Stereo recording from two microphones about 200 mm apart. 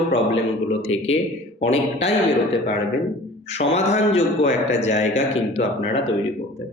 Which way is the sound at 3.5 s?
35° left (ahead or behind).